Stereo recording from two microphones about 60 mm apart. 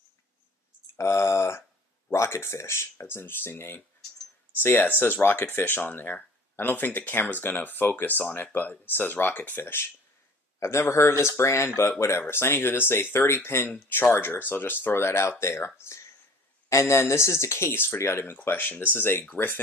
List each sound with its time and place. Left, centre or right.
0.9 s speech: left
10.6 s speech: left
19.2 s speech: left